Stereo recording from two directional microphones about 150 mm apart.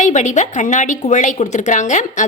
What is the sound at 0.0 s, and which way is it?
A woman's voice, 55° left (ahead or behind).